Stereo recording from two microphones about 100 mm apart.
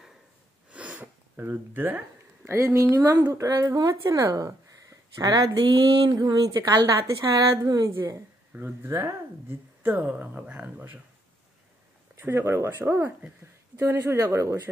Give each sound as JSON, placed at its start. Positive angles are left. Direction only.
{"t": 0.7, "sound": "sniff", "side_deg": -15}
{"t": 3.3, "sound": "speech", "side_deg": -40}
{"t": 5.6, "sound": "a woman's voice", "side_deg": -50}
{"t": 8.5, "sound": "speech", "side_deg": -25}
{"t": 9.9, "sound": "speech", "side_deg": -15}
{"t": 12.2, "sound": "speech", "side_deg": -25}